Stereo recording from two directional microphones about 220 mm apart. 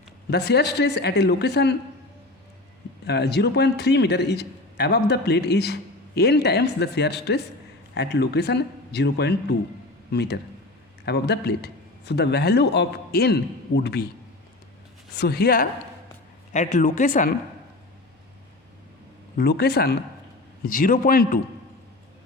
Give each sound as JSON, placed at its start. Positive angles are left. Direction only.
{"t": 0.3, "sound": "a man's voice", "side_deg": 45}
{"t": 3.1, "sound": "a man's voice", "side_deg": 50}
{"t": 15.1, "sound": "a man's voice", "side_deg": 45}
{"t": 16.5, "sound": "speech", "side_deg": 30}
{"t": 19.4, "sound": "a man's voice", "side_deg": 45}